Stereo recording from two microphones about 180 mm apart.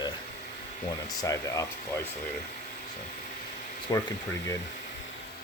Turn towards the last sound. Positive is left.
turn(degrees=20)  # may be behind; listen again after turning